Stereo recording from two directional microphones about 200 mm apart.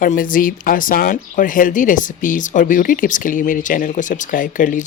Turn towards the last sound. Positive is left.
turn(degrees=40)  # may be behind; listen again after turning